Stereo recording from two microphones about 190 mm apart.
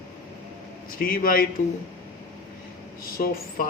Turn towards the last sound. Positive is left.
turn(degrees=50)  # may be behind; listen again after turning